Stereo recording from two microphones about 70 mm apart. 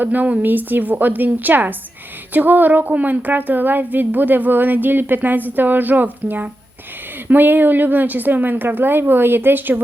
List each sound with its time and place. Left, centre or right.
0.0 s a woman's voice: right